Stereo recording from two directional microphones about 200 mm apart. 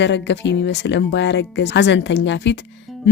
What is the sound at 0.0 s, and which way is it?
Speech, 60° left (ahead or behind).